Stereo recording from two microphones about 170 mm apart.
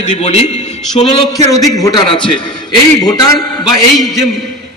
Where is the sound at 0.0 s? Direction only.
40° left (ahead or behind).